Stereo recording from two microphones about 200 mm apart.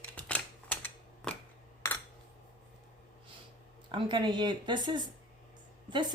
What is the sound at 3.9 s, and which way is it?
Speech, 25° right (ahead or behind).